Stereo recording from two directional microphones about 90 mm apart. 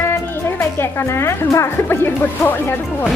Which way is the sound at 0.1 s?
25° left (ahead or behind).